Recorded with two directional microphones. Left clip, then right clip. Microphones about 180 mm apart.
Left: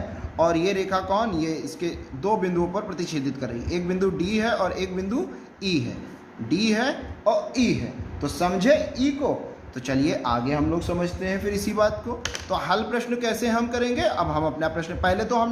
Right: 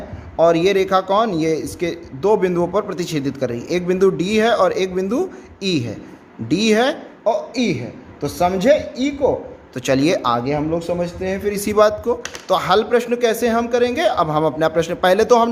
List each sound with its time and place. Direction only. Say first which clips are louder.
0.3 s a man's voice: right 8 dB; 50° right (ahead or behind)
8.2 s a man's voice: right 6 dB; 45° right (ahead or behind)
9.7 s a man's voice: right 8 dB; 60° right (ahead or behind)